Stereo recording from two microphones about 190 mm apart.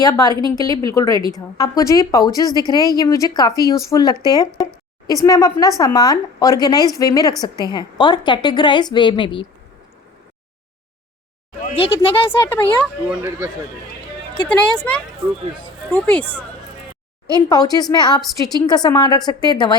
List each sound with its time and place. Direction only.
0.0 s speech: 20° left (ahead or behind)
11.7 s speech: 30° left (ahead or behind)
12.5 s speech: 10° left (ahead or behind)
14.4 s speech: 5° left (ahead or behind)
17.3 s speech: 20° left (ahead or behind)
18.2 s a woman's voice: centre (ahead or behind)
18.6 s speech: 20° left (ahead or behind)